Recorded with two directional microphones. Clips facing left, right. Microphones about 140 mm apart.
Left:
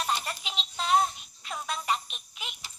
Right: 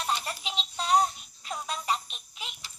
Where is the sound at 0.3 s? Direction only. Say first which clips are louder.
Right 1 dB; 35° right (ahead or behind).